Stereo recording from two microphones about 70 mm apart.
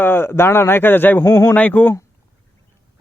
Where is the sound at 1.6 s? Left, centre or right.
Left.